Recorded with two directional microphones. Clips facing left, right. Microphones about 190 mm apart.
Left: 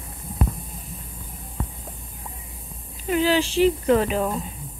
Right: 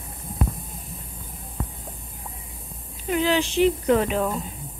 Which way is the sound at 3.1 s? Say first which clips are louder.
Left 2 dB; 5° left (ahead or behind).